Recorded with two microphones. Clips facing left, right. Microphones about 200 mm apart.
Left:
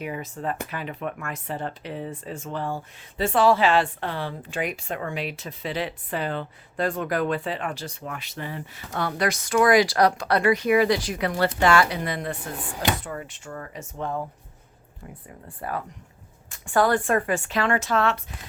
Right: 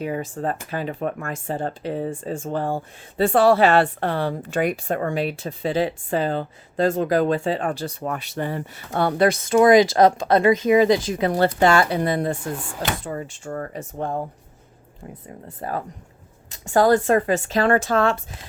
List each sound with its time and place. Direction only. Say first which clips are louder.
0.0 s speech: right 5 dB; 35° right (ahead or behind)
2.5 s speech: right 5 dB; 50° right (ahead or behind)
3.2 s speech: right 5 dB; 35° right (ahead or behind)
3.5 s speech: right 4 dB; 60° right (ahead or behind)
9.0 s speech: right 7 dB; 30° right (ahead or behind)
13.5 s speech: right 8 dB; 40° right (ahead or behind)
16.5 s speech: right 5 dB; 25° right (ahead or behind)
17.5 s speech: right 5 dB; 35° right (ahead or behind)